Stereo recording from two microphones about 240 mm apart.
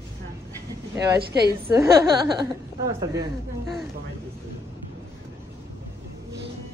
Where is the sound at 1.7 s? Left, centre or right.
Centre.